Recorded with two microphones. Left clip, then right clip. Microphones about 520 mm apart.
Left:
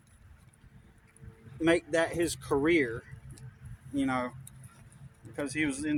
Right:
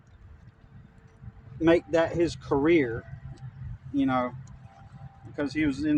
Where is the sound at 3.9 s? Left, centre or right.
Left.